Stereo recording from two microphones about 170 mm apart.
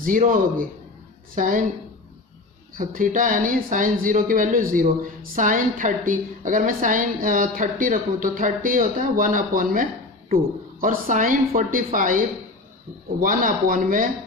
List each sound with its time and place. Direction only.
0.0 s speech: 55° right (ahead or behind)
2.7 s speech: 55° right (ahead or behind)